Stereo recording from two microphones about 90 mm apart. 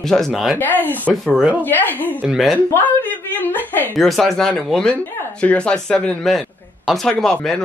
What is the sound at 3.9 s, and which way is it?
A man's voice, centre (ahead or behind).